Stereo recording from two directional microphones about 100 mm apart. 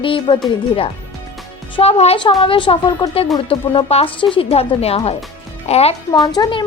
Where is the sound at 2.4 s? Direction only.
60° left (ahead or behind).